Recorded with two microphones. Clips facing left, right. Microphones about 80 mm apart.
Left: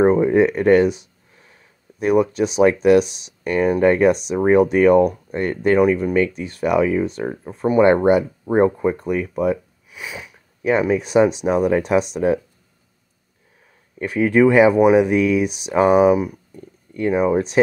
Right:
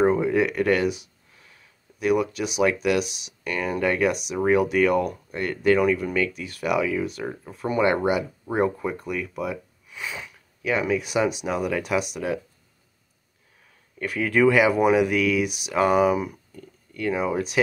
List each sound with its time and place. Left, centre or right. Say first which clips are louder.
0.0 s speech: left 6 dB; left
9.8 s a sound: left 2 dB; centre
10.6 s speech: left 6 dB; left
13.9 s speech: left 6 dB; left